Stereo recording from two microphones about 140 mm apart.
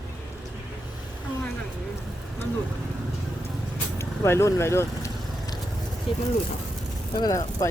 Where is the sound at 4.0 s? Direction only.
20° left (ahead or behind).